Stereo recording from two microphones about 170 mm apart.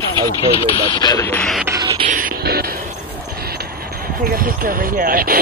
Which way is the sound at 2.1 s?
55° right (ahead or behind).